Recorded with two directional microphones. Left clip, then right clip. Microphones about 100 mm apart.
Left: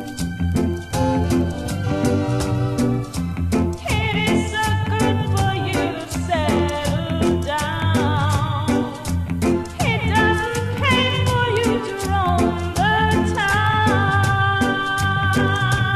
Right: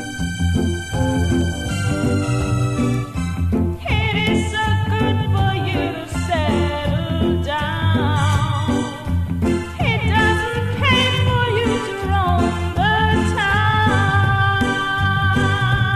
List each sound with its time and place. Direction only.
0.9 s music: 15° left (ahead or behind)
3.9 s music: 5° right (ahead or behind)